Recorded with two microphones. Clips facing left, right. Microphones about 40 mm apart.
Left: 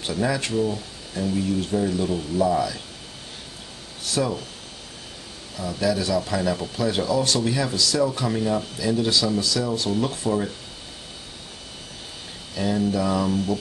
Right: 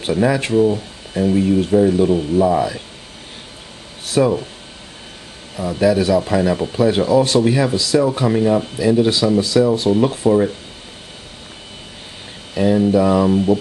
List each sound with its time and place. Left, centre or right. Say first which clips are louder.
0.0 s speech: right 8 dB; right
4.0 s speech: right 9 dB; right
5.6 s speech: right 8 dB; right
12.5 s speech: right 9 dB; right